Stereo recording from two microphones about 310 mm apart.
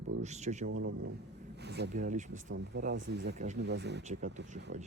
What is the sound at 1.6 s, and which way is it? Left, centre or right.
Speech, right.